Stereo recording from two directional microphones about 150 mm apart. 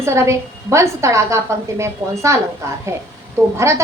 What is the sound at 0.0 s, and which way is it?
A woman's voice, 20° right (ahead or behind).